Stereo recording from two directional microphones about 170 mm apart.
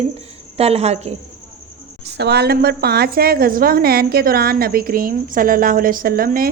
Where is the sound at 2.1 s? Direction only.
75° right (ahead or behind).